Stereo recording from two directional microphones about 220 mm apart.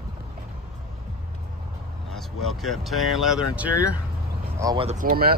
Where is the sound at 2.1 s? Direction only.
Centre (ahead or behind).